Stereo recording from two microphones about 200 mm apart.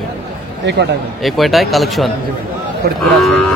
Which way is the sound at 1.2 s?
Centre (ahead or behind).